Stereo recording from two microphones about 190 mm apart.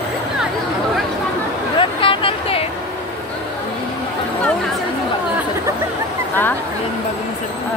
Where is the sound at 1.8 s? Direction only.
25° left (ahead or behind).